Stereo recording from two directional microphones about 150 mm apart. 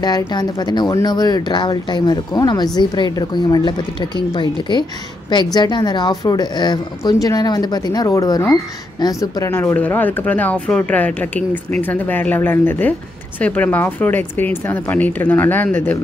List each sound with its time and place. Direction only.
0.3 s speech: 30° left (ahead or behind); by 16.0 s 10° left (ahead or behind)